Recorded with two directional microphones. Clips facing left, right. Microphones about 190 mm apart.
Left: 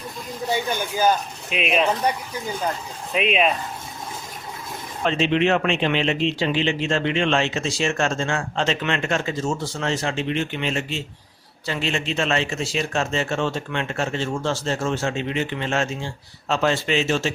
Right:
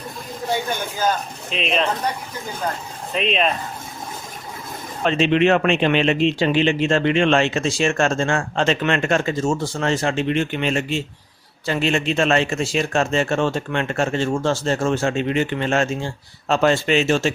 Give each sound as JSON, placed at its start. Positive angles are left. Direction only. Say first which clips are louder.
{"t": 1.5, "sound": "speech", "louder": "left 1 dB", "side_deg": 10}
{"t": 3.1, "sound": "speech", "louder": "even", "side_deg": 5}
{"t": 5.0, "sound": "speech", "louder": "right 3 dB", "side_deg": -60}